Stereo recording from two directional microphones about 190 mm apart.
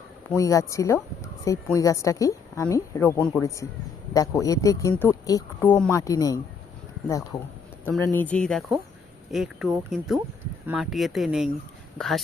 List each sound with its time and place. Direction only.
0.3 s speech: 15° left (ahead or behind)
4.1 s speech: 15° left (ahead or behind)
7.9 s speech: 10° left (ahead or behind)